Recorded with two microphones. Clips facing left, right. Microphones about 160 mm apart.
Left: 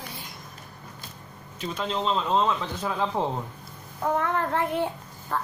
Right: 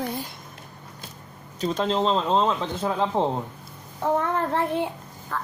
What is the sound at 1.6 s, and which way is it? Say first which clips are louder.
Speech: right 6 dB; 35° right (ahead or behind).